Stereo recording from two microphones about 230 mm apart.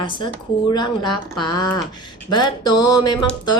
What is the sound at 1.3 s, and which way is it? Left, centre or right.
Speech, centre.